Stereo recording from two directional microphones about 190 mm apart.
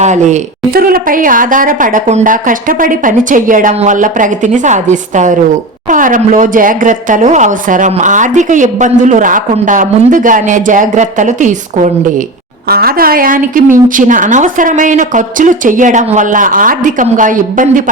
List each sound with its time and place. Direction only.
0.0 s a woman's voice: 40° right (ahead or behind)
12.6 s a woman's voice: 55° right (ahead or behind)